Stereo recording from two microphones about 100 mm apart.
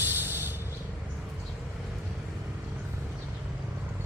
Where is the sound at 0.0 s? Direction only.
20° right (ahead or behind).